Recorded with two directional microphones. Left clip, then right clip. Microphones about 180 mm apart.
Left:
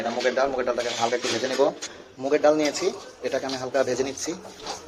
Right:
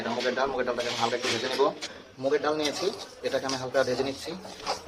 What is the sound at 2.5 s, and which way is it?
A man's voice, centre (ahead or behind).